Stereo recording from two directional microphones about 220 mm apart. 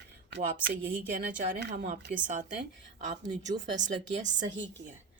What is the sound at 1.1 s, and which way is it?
Speech, 35° right (ahead or behind).